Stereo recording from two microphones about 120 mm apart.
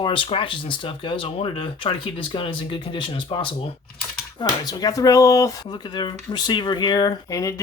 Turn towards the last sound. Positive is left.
turn(degrees=30)  # may be behind; listen again after turning